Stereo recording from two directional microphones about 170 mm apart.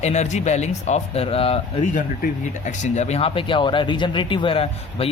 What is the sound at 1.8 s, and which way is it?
Speech, 50° left (ahead or behind).